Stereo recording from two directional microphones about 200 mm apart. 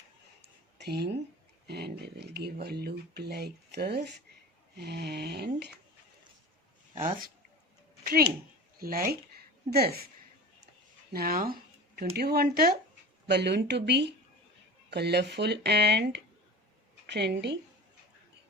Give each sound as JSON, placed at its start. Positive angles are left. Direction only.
{"t": 0.8, "sound": "speech", "side_deg": -55}
{"t": 6.9, "sound": "speech", "side_deg": -35}
{"t": 8.8, "sound": "speech", "side_deg": -45}
{"t": 11.1, "sound": "a sound", "side_deg": -45}
{"t": 12.1, "sound": "speech", "side_deg": -50}